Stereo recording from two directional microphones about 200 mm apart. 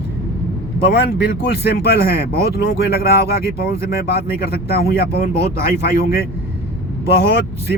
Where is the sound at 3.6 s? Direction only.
50° left (ahead or behind).